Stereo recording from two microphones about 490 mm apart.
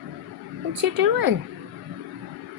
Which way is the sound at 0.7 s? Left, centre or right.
Right.